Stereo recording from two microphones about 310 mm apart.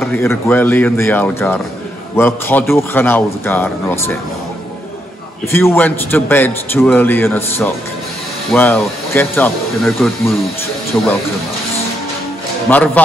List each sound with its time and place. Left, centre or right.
0.0 s a man's voice: centre
5.5 s a man's voice: centre
12.6 s speech: centre